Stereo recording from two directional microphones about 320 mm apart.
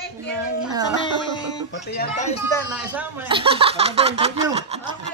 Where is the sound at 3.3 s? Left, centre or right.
Centre.